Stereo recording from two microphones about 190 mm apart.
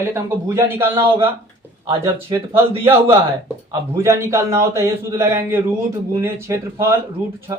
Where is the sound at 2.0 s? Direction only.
15° right (ahead or behind).